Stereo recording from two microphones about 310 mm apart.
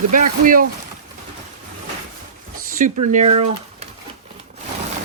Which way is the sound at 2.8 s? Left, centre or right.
Right.